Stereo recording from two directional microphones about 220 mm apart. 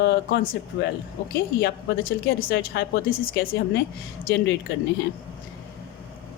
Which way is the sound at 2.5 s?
45° left (ahead or behind).